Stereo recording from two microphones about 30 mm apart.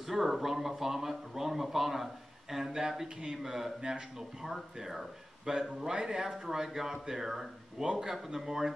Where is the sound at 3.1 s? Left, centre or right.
Right.